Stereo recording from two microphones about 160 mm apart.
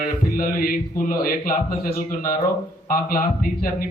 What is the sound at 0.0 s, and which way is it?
A man's voice, 60° left (ahead or behind).